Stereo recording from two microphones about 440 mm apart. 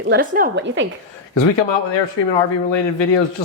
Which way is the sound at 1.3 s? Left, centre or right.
Left.